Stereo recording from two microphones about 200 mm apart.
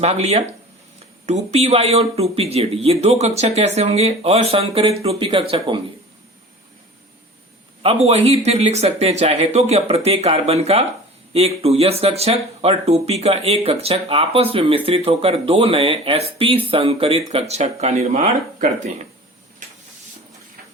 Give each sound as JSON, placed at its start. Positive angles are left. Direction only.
{"t": 0.0, "sound": "speech", "side_deg": -30}
{"t": 7.8, "sound": "speech", "side_deg": -30}